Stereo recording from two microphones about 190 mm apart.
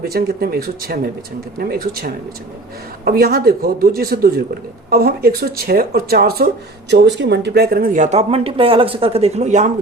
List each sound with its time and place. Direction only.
0.0 s speech: 55° right (ahead or behind)
6.9 s speech: 65° right (ahead or behind); by 9.6 s 35° right (ahead or behind)